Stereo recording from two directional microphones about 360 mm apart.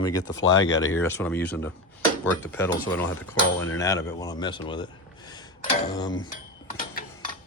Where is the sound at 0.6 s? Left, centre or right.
Left.